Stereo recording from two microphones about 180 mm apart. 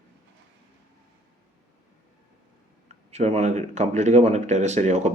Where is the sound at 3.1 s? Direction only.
35° right (ahead or behind).